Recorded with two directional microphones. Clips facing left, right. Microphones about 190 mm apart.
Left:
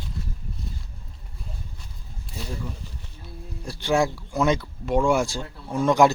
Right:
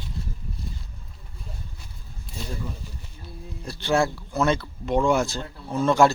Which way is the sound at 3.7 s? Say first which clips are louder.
Even; 15° left (ahead or behind).